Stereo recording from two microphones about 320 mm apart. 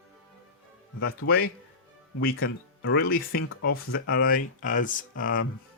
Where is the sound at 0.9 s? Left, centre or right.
Left.